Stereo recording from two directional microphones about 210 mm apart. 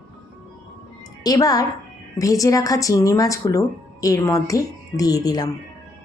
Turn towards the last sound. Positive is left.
turn(degrees=20)  # may be behind; listen again after turning